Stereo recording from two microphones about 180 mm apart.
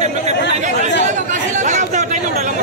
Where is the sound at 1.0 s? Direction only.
45° right (ahead or behind).